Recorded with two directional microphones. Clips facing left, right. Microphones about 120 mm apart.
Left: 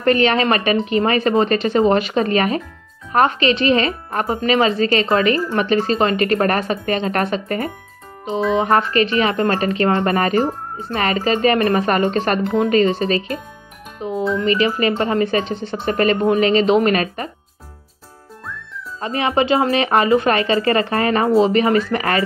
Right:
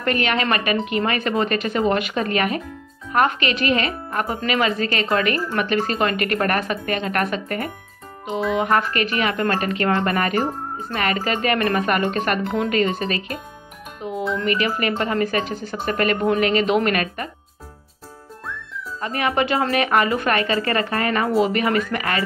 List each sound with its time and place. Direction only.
0.0 s a woman's voice: 30° left (ahead or behind)
14.4 s speech: 25° left (ahead or behind)
18.9 s speech: 25° left (ahead or behind)